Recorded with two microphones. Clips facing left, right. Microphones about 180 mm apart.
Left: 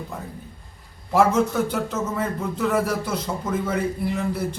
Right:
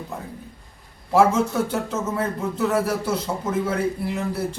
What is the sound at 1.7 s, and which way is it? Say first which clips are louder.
Speech: even; 5° right (ahead or behind).